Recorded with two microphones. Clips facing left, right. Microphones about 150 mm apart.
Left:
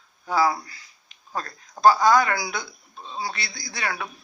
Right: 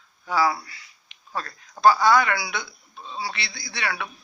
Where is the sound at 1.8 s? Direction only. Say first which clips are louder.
Left 1 dB; 35° left (ahead or behind).